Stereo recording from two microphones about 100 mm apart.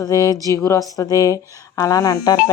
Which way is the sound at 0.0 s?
35° left (ahead or behind).